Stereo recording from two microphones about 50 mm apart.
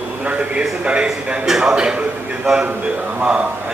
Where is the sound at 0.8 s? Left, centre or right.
Right.